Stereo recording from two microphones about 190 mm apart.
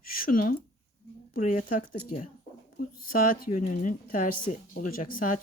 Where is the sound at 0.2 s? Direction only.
50° left (ahead or behind).